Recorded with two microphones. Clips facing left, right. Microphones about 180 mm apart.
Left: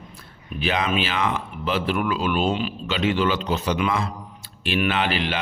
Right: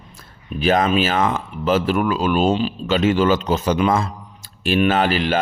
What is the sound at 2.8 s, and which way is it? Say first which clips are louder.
A man's voice: right 6 dB; 45° right (ahead or behind).